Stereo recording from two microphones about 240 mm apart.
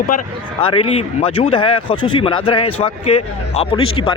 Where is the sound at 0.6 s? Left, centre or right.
Left.